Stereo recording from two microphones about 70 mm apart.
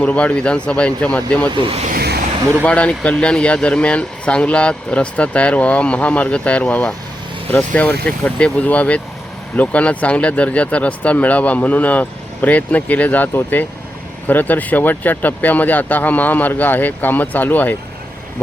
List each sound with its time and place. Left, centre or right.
0.0 s speech: centre
2.6 s speech: centre